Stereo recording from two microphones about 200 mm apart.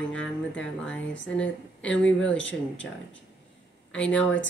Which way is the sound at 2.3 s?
65° left (ahead or behind).